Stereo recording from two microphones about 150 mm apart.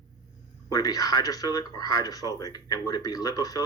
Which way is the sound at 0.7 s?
25° left (ahead or behind).